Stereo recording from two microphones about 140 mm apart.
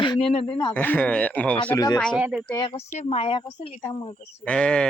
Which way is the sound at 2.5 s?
35° left (ahead or behind).